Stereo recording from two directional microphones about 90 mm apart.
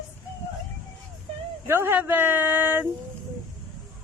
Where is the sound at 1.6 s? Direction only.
25° right (ahead or behind).